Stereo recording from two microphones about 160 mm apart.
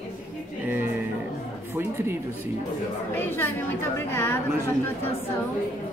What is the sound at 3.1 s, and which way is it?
A woman's voice, 15° left (ahead or behind).